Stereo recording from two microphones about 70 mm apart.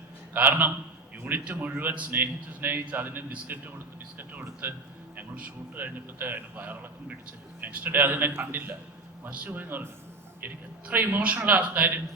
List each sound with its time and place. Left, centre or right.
0.3 s a man's voice: right